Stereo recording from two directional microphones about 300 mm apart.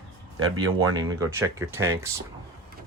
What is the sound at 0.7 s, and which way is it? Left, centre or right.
Speech, centre.